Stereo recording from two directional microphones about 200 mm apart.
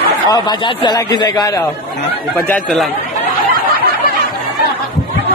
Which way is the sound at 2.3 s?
10° left (ahead or behind).